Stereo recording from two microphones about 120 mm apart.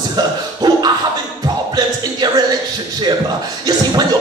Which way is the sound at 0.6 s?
30° right (ahead or behind).